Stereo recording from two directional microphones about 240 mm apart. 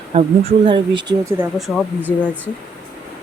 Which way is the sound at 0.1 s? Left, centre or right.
Right.